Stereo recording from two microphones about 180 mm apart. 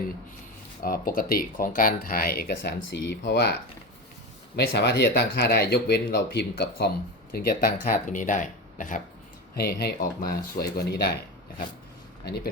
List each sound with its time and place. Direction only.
0.8 s speech: 55° left (ahead or behind)
7.3 s speech: 55° left (ahead or behind)
9.6 s speech: 60° left (ahead or behind)